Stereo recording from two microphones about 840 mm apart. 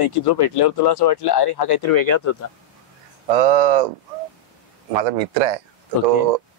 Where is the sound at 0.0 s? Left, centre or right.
Left.